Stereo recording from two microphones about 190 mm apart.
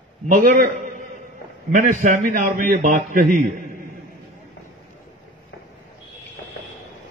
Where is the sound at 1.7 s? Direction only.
40° right (ahead or behind).